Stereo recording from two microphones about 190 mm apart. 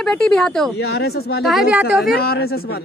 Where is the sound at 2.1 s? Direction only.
55° left (ahead or behind).